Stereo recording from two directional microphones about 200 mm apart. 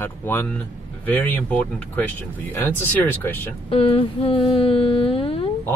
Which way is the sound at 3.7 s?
30° left (ahead or behind).